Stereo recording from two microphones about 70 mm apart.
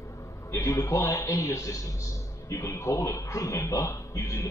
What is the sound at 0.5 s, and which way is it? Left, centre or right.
A man's voice, left.